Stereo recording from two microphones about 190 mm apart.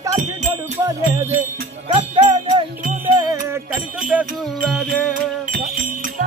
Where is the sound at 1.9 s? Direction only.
35° right (ahead or behind).